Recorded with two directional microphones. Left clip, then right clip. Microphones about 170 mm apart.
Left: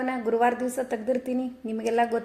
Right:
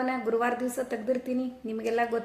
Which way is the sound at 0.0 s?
15° left (ahead or behind).